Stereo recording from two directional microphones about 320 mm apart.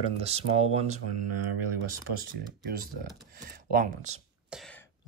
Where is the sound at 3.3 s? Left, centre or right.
Right.